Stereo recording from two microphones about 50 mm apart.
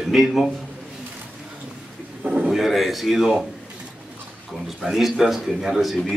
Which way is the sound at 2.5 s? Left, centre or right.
Centre.